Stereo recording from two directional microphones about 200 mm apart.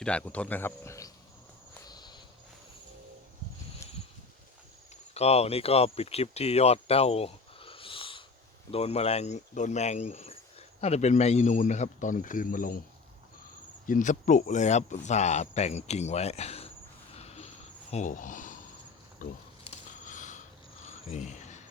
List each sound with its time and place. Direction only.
0.0 s speech: 5° left (ahead or behind)
1.9 s walk: 20° left (ahead or behind)
5.1 s speech: 30° left (ahead or behind)
13.8 s speech: 40° left (ahead or behind)
17.2 s a sound: 30° left (ahead or behind)
17.9 s speech: 40° left (ahead or behind)
19.2 s a sound: 40° left (ahead or behind)
20.8 s cricket: 35° left (ahead or behind)